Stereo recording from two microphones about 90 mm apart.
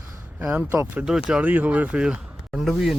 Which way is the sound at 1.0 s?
10° right (ahead or behind).